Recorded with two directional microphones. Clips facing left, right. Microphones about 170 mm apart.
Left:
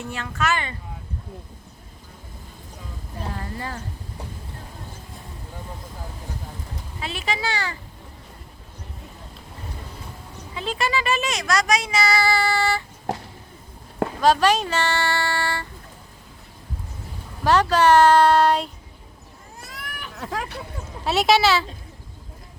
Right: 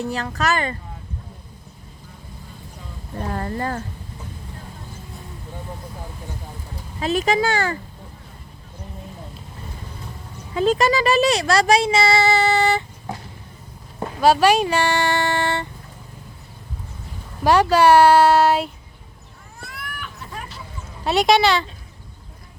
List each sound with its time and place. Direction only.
0.0 s speech: 35° right (ahead or behind)
3.2 s speech: 50° right (ahead or behind)
7.0 s speech: 40° right (ahead or behind)
10.5 s speech: 45° right (ahead or behind); by 12.8 s 20° right (ahead or behind)
13.1 s a sound: 80° left
14.2 s speech: 10° right (ahead or behind)
17.4 s speech: 10° right (ahead or behind)
20.1 s hubbub: 90° left
21.0 s speech: centre (ahead or behind)